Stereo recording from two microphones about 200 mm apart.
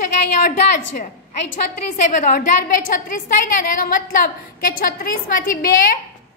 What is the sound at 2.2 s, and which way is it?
A woman's voice, 40° left (ahead or behind).